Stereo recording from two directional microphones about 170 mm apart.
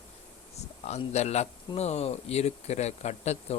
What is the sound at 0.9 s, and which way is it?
Speech, 40° left (ahead or behind).